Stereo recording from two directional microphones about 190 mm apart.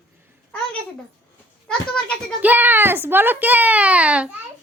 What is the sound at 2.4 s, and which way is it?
A child's voice, 10° right (ahead or behind).